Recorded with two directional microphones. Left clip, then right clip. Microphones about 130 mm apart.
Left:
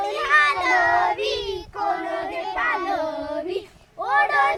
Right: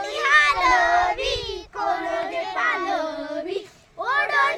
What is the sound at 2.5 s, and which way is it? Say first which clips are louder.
Child singing: even; 10° right (ahead or behind).